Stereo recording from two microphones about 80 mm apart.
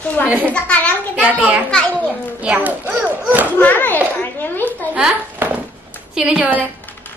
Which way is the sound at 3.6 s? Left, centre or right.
Left.